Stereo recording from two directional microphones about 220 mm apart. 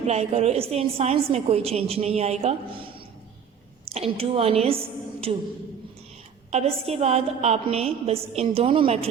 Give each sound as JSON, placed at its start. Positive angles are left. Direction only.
{"t": 0.0, "sound": "a woman's voice", "side_deg": -30}
{"t": 6.5, "sound": "a woman's voice", "side_deg": -30}